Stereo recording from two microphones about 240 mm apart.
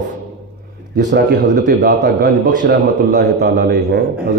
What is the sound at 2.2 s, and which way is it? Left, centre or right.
Speech, right.